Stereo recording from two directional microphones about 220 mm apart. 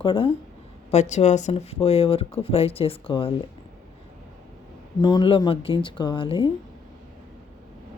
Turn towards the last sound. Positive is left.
turn(degrees=25)  # may be behind; listen again after turning